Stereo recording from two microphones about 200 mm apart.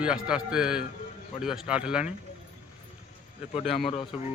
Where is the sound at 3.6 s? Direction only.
30° left (ahead or behind).